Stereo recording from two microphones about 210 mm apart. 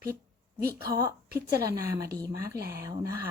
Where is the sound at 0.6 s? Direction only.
15° right (ahead or behind).